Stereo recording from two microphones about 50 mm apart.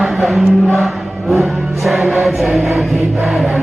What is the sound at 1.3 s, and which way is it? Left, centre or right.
Music, centre.